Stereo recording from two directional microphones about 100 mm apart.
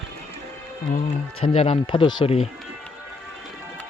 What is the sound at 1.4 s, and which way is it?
Speech, 70° left (ahead or behind).